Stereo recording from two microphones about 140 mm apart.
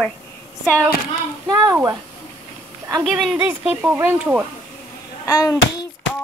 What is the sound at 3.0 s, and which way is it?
Speech, centre (ahead or behind).